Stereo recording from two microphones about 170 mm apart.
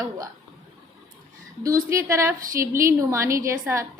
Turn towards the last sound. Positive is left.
turn(degrees=-15)  # may be behind; listen again after turning